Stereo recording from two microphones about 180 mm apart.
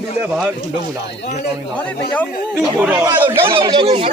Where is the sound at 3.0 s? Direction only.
25° right (ahead or behind).